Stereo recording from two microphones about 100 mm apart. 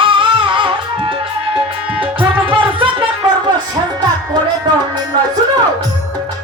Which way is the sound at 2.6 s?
60° right (ahead or behind).